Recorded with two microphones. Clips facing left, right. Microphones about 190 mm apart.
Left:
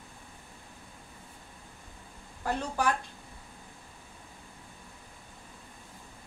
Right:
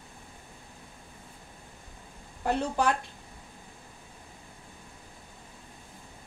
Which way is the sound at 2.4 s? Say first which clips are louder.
Right 3 dB; 20° right (ahead or behind).